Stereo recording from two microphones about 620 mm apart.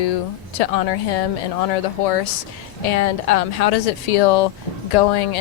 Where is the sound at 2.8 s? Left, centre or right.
Left.